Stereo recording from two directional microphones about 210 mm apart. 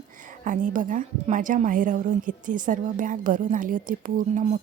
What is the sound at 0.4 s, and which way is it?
A woman's voice, 40° right (ahead or behind).